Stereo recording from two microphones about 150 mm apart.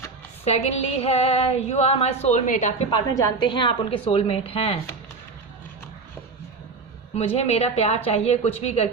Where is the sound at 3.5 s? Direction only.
35° left (ahead or behind).